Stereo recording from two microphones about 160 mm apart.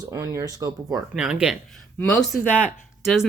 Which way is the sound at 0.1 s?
20° right (ahead or behind).